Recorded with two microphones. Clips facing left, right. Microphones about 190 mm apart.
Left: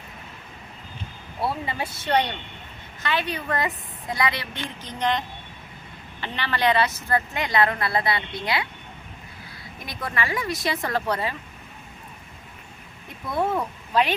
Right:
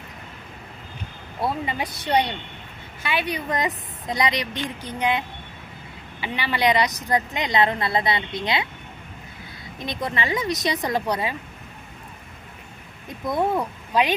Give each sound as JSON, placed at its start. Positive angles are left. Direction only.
{"t": 1.4, "sound": "a woman's voice", "side_deg": -15}
{"t": 9.8, "sound": "a woman's voice", "side_deg": -20}
{"t": 13.1, "sound": "speech", "side_deg": -15}